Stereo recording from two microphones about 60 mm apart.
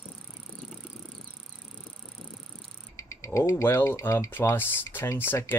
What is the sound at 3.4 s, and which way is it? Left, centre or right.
Speech, left.